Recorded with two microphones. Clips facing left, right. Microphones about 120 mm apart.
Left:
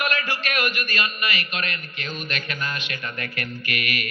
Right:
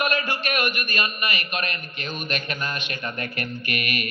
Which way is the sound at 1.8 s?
20° right (ahead or behind).